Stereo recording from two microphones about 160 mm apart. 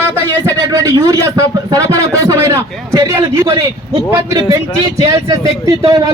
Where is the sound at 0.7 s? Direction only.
20° right (ahead or behind).